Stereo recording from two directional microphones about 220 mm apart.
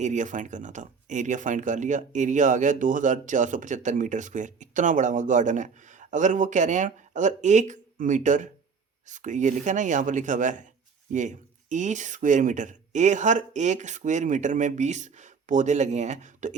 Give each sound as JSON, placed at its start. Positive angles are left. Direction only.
{"t": 0.0, "sound": "speech", "side_deg": -35}